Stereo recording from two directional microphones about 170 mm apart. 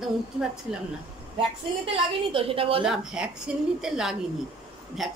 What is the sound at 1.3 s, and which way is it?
A woman's voice, 30° right (ahead or behind).